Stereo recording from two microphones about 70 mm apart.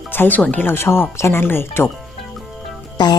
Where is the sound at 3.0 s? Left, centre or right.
Left.